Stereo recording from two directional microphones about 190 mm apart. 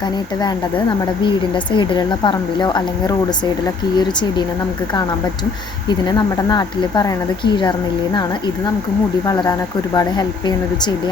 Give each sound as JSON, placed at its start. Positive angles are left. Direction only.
{"t": 1.2, "sound": "a woman's voice", "side_deg": 25}
{"t": 5.9, "sound": "a woman's voice", "side_deg": 20}
{"t": 9.2, "sound": "a woman's voice", "side_deg": 20}